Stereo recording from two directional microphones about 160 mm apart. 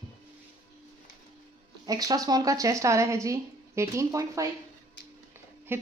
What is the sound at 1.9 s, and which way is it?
Speech, 25° right (ahead or behind).